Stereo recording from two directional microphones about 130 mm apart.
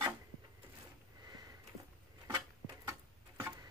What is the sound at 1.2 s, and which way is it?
Sniff, 30° right (ahead or behind).